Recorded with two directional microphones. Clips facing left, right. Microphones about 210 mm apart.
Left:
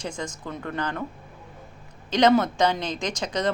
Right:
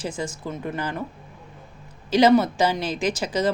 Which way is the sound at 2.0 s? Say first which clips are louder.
Right 3 dB; 5° right (ahead or behind).